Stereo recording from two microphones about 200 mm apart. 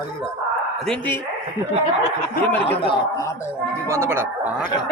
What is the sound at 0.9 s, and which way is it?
Speech, 10° left (ahead or behind).